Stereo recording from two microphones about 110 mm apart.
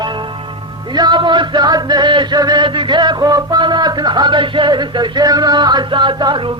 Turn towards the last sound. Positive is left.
turn(degrees=-45)  # may be behind; listen again after turning